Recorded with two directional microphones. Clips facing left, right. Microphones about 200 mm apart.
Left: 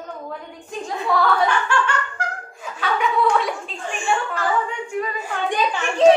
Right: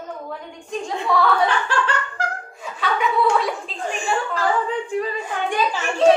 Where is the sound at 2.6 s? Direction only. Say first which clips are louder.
Even; centre (ahead or behind).